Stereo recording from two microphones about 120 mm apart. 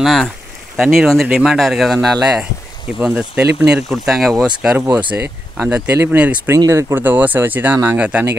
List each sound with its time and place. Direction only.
0.0 s speech: centre (ahead or behind)
5.1 s speech: 15° right (ahead or behind)
6.5 s speech: 25° right (ahead or behind)